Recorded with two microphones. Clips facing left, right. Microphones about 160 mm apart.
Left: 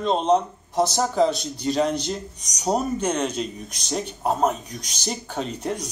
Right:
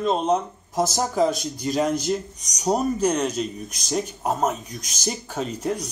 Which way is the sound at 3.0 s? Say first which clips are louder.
Right 2 dB; 5° right (ahead or behind).